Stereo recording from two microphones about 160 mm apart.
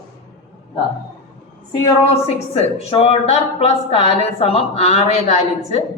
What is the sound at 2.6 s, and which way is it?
A woman's voice, 40° left (ahead or behind).